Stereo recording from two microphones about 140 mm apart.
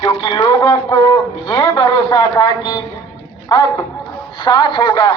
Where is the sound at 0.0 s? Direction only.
35° left (ahead or behind).